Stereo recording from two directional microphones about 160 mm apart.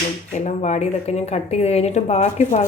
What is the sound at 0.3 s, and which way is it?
A woman's voice, 50° left (ahead or behind).